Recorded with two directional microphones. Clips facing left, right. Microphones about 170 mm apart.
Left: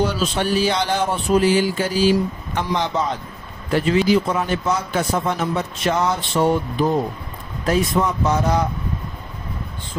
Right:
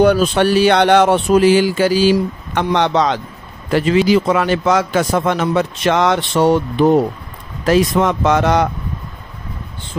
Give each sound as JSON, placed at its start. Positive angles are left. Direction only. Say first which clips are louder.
{"t": 0.0, "sound": "a man's voice", "louder": "right 9 dB", "side_deg": -60}